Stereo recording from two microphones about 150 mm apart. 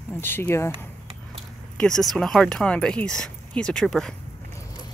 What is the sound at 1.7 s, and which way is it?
Speech, 5° left (ahead or behind).